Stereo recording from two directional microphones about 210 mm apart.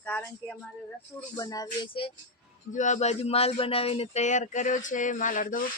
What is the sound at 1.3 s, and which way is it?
Speech, 15° left (ahead or behind).